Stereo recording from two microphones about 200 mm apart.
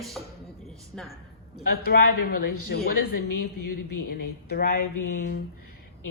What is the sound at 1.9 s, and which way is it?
Speech, 50° left (ahead or behind).